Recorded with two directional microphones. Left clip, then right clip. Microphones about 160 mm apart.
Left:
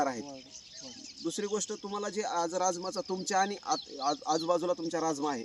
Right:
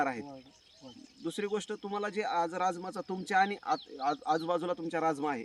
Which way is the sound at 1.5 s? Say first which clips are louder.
Even; 10° right (ahead or behind).